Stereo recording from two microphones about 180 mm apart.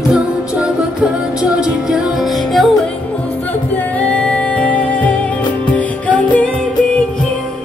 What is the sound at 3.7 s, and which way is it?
Music, 10° left (ahead or behind).